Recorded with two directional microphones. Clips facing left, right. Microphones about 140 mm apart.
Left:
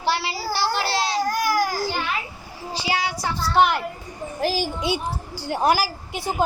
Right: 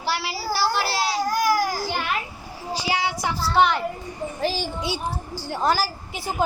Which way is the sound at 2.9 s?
20° right (ahead or behind).